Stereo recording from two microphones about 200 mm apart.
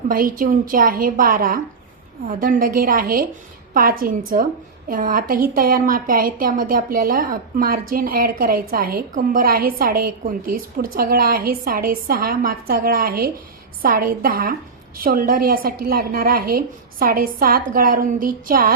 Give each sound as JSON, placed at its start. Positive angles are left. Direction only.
{"t": 0.1, "sound": "a woman's voice", "side_deg": -45}